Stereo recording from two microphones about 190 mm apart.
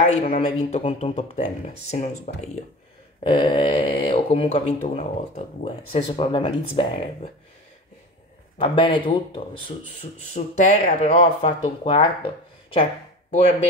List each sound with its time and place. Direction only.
0.0 s speech: 35° left (ahead or behind)
3.3 s speech: 25° left (ahead or behind)
8.5 s speech: 25° left (ahead or behind)
13.3 s speech: 35° left (ahead or behind)